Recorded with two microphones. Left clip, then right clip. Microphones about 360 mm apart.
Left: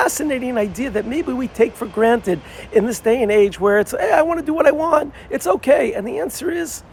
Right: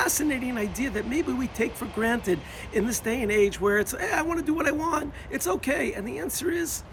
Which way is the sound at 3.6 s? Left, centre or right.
Left.